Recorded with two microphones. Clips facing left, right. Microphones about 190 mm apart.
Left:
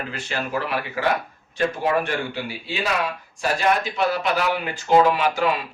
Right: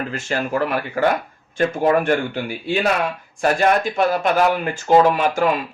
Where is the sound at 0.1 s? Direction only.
45° right (ahead or behind).